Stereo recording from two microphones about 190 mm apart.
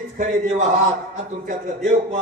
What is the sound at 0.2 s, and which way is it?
Speech, 40° right (ahead or behind).